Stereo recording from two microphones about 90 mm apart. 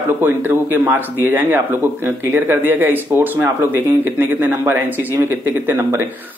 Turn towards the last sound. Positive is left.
turn(degrees=-25)  # may be behind; listen again after turning